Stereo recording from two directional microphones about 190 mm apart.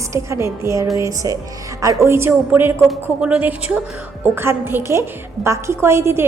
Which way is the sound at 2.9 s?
Centre (ahead or behind).